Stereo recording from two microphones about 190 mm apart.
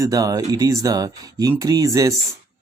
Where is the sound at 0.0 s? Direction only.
20° right (ahead or behind).